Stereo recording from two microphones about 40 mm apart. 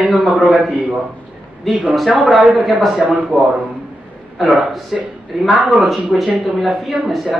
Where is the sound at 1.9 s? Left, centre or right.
Centre.